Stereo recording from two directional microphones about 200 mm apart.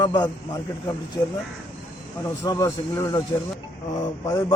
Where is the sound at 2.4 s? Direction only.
15° left (ahead or behind).